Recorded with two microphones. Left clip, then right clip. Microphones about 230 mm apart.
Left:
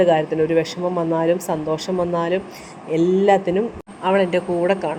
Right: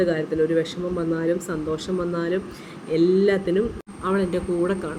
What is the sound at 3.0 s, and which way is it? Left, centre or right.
Speech, left.